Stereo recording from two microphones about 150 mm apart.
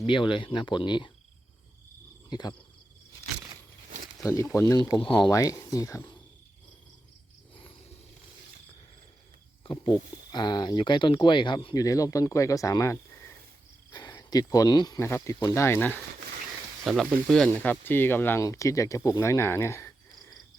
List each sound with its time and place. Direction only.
0.0 s speech: 35° left (ahead or behind)
2.3 s speech: 30° left (ahead or behind)
4.2 s speech: 20° left (ahead or behind)
9.6 s speech: 30° left (ahead or behind); by 16.0 s 15° left (ahead or behind)
16.8 s speech: centre (ahead or behind); by 19.9 s 20° left (ahead or behind)